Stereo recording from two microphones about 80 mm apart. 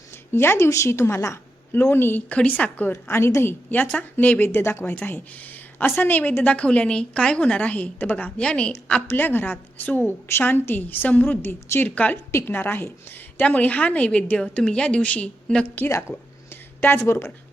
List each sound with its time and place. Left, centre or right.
0.3 s a woman's voice: left
8.4 s a woman's voice: centre
9.0 s a woman's voice: left
11.4 s a woman's voice: left
11.9 s a woman's voice: centre
16.5 s a sound: left